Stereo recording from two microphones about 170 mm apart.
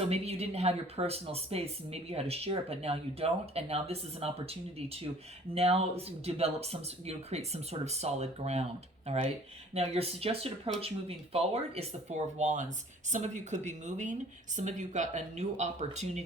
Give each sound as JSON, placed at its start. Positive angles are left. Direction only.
{"t": 0.1, "sound": "speech", "side_deg": -35}
{"t": 5.5, "sound": "speech", "side_deg": -35}